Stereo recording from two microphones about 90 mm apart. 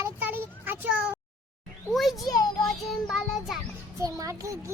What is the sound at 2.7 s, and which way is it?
Child singing, centre (ahead or behind).